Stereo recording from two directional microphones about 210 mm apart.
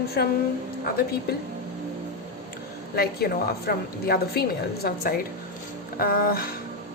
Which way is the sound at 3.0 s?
50° left (ahead or behind).